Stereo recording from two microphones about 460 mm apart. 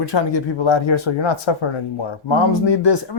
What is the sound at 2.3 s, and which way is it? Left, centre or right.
Speech, left.